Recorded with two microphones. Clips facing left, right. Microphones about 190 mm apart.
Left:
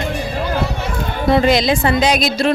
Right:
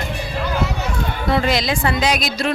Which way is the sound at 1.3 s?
20° left (ahead or behind).